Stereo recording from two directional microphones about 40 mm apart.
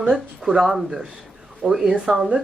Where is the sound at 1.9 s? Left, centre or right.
Right.